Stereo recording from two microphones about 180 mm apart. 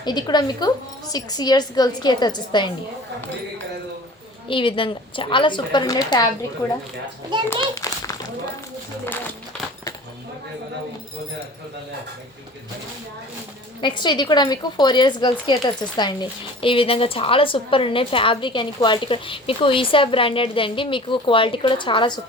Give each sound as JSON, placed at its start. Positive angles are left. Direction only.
{"t": 0.0, "sound": "a woman's voice", "side_deg": 25}
{"t": 4.4, "sound": "a woman's voice", "side_deg": 30}
{"t": 7.5, "sound": "a woman's voice", "side_deg": 20}
{"t": 13.8, "sound": "a woman's voice", "side_deg": 25}